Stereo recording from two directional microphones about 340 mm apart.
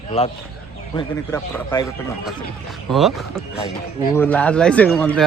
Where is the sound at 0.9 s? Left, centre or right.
Centre.